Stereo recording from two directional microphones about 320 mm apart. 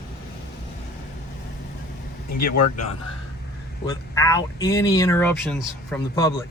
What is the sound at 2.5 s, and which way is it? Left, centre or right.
Speech, left.